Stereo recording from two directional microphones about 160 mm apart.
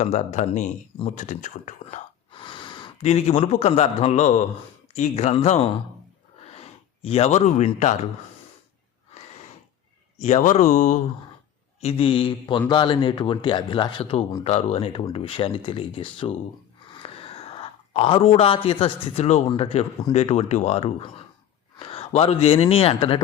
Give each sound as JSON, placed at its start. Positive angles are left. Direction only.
{"t": 0.0, "sound": "speech", "side_deg": 45}
{"t": 2.3, "sound": "gasp", "side_deg": 30}
{"t": 3.0, "sound": "a man's voice", "side_deg": 40}
{"t": 10.2, "sound": "speech", "side_deg": 45}
{"t": 11.8, "sound": "a man's voice", "side_deg": 35}
{"t": 16.9, "sound": "a sound", "side_deg": 35}
{"t": 19.5, "sound": "a man's voice", "side_deg": 35}